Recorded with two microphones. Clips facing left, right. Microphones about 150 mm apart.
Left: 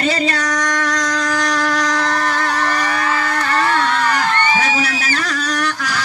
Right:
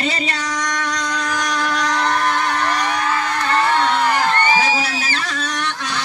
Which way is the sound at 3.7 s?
20° right (ahead or behind).